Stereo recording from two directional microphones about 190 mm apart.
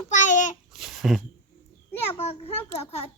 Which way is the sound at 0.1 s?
40° left (ahead or behind).